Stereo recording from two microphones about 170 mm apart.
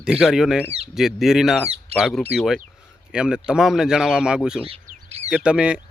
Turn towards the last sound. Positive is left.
turn(degrees=-5)  # may be behind; listen again after turning